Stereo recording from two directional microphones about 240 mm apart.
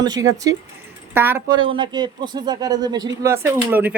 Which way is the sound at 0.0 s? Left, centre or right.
Centre.